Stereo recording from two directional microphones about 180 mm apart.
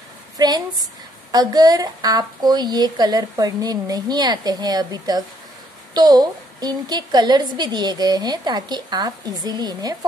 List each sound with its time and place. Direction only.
0.4 s a woman's voice: 20° right (ahead or behind)